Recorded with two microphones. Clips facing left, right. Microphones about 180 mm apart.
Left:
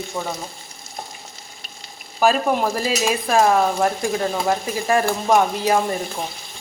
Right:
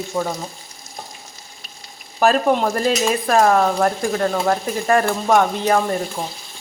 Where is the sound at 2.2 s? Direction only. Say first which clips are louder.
Right 2 dB; centre (ahead or behind).